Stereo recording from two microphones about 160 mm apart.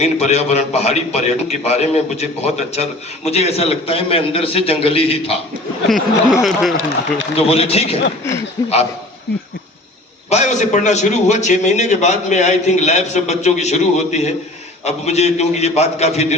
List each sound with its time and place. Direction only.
0.0 s a man's voice: 45° left (ahead or behind)
5.9 s speech: centre (ahead or behind)
7.3 s a man's voice: 40° left (ahead or behind)
8.6 s a man's voice: 25° left (ahead or behind)
10.2 s a man's voice: 45° left (ahead or behind)